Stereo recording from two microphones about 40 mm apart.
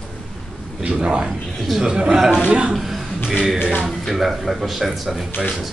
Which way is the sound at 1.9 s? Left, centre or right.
Centre.